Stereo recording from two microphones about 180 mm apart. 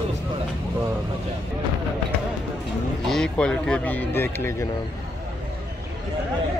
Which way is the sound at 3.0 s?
5° left (ahead or behind).